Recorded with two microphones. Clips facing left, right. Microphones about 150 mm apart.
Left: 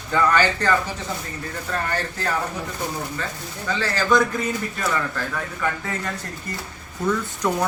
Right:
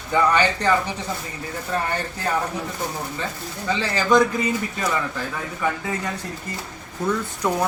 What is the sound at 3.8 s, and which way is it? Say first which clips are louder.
Speech: right 2 dB; 15° right (ahead or behind).